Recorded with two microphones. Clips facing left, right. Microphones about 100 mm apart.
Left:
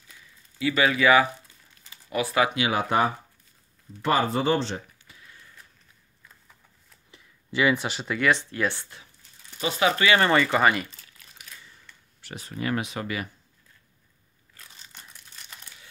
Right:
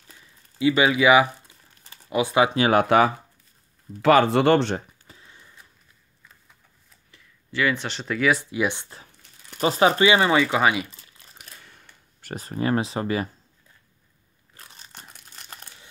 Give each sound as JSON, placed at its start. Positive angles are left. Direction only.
{"t": 0.6, "sound": "speech", "side_deg": -20}
{"t": 2.7, "sound": "speech", "side_deg": -70}
{"t": 5.0, "sound": "a sound", "side_deg": -30}
{"t": 7.1, "sound": "speech", "side_deg": 15}
{"t": 9.6, "sound": "speech", "side_deg": -35}
{"t": 9.9, "sound": "speech", "side_deg": -20}
{"t": 10.2, "sound": "speech", "side_deg": -5}
{"t": 11.6, "sound": "a sound", "side_deg": -60}
{"t": 14.6, "sound": "crumpling", "side_deg": -45}